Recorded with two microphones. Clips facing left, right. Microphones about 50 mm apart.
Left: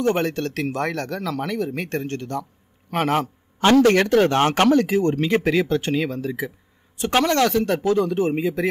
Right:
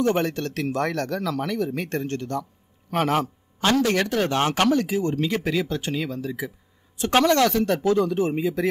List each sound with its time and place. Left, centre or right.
0.0 s speech: left
3.5 s speech: left